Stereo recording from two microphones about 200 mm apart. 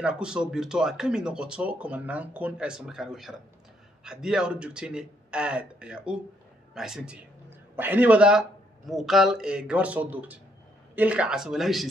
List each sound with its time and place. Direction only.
0.0 s a man's voice: 5° right (ahead or behind)